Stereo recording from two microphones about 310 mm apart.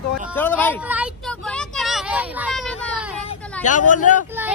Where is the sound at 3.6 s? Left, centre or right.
Left.